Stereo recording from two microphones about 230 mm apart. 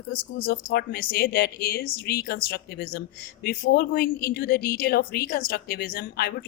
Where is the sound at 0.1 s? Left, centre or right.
Left.